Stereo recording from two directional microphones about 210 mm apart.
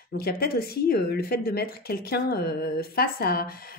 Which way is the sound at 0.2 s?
45° left (ahead or behind).